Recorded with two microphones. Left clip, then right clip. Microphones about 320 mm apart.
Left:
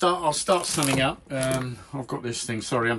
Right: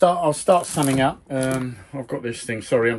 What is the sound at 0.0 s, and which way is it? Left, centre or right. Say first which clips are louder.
Speech: right 5 dB; centre.